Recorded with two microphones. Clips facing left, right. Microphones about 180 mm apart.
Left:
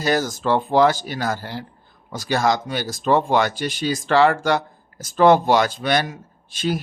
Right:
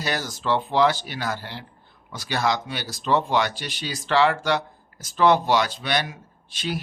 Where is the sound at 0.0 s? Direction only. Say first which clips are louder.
Left 7 dB; 45° left (ahead or behind).